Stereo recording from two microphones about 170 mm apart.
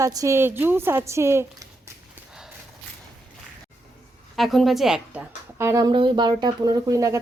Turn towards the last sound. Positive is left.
turn(degrees=-20)  # may be behind; listen again after turning